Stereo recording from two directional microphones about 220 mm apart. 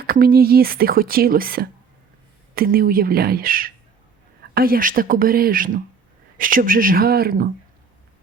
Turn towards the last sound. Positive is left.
turn(degrees=-45)  # may be behind; listen again after turning